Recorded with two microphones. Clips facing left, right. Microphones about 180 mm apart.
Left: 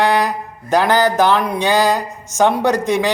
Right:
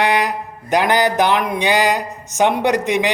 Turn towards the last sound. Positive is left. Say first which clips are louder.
# left 1 dB
turn(degrees=-15)  # may be behind; listen again after turning